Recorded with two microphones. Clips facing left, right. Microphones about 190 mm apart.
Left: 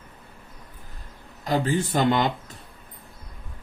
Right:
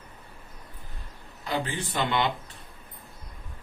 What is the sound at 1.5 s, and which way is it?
Speech, 40° left (ahead or behind).